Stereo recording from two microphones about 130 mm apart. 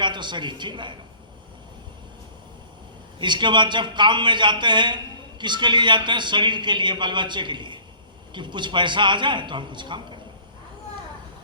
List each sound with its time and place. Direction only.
0.0 s a woman's voice: 35° right (ahead or behind)
3.2 s a man's voice: 35° right (ahead or behind)